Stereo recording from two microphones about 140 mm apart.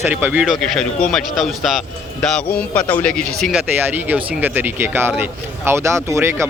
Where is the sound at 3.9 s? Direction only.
10° right (ahead or behind).